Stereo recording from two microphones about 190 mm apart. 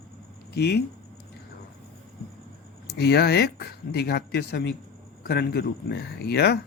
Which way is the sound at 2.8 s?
60° left (ahead or behind).